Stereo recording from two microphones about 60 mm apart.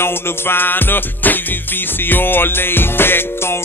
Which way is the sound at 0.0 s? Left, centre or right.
Left.